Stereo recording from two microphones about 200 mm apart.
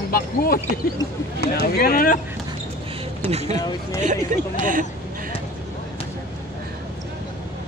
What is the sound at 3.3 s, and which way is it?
Speech, 30° right (ahead or behind).